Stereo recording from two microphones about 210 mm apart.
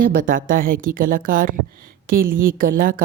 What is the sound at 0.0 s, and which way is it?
A woman's voice, 40° right (ahead or behind).